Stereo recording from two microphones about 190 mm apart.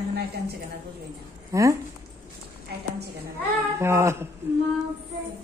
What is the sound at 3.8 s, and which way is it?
Speech, 15° right (ahead or behind).